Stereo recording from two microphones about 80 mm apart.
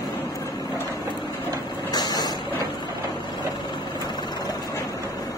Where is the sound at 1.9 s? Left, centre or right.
Left.